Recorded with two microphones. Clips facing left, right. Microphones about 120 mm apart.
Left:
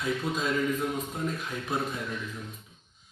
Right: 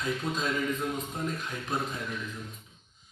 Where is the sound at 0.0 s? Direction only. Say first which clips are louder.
Left 1 dB; centre (ahead or behind).